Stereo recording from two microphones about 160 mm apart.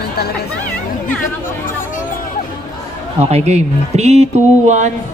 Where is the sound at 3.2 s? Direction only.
40° right (ahead or behind).